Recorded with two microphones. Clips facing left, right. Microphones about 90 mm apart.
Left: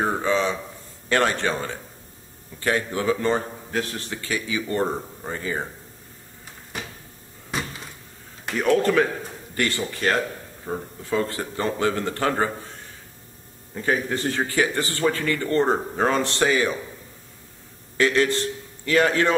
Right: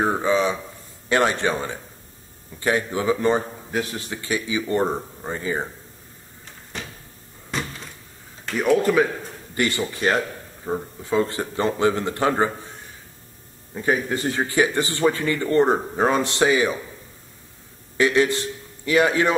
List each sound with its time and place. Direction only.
0.0 s a sound: 15° right (ahead or behind)
1.0 s a man's voice: 15° right (ahead or behind)
8.5 s a man's voice: 5° right (ahead or behind)
13.7 s a man's voice: 10° right (ahead or behind)
17.9 s a man's voice: 15° right (ahead or behind)